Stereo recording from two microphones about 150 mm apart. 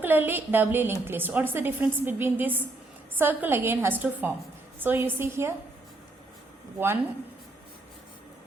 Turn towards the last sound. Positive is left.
turn(degrees=-15)  # may be behind; listen again after turning